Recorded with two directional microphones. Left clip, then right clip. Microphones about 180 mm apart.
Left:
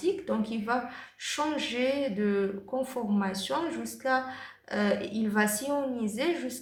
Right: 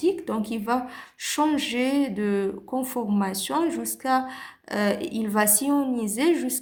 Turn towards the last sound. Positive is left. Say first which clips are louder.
# right 7 dB
turn(degrees=-45)  # may be behind; listen again after turning